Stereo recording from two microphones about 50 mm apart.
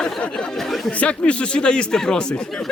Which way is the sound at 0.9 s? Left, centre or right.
Left.